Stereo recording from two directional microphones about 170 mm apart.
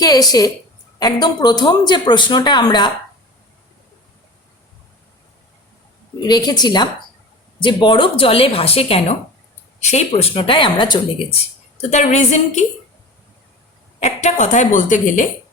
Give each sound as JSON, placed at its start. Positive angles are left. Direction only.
{"t": 0.0, "sound": "a woman's voice", "side_deg": 20}
{"t": 6.2, "sound": "a woman's voice", "side_deg": 25}
{"t": 11.8, "sound": "a woman's voice", "side_deg": 40}
{"t": 14.0, "sound": "a woman's voice", "side_deg": 45}